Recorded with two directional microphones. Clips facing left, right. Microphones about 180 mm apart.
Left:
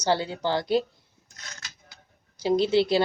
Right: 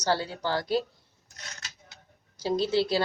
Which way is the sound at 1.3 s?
35° right (ahead or behind).